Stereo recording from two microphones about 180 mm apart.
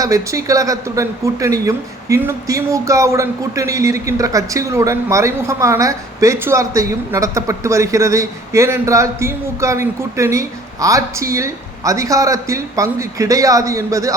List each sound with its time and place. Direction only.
0.0 s speech: 20° right (ahead or behind)